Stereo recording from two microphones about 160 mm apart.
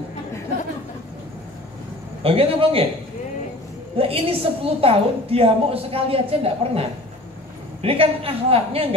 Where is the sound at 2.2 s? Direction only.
35° right (ahead or behind).